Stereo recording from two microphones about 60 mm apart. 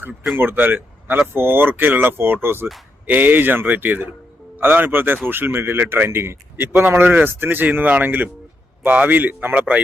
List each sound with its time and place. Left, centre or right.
0.3 s a man's voice: right